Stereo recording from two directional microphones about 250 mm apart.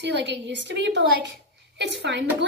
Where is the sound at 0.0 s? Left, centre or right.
Right.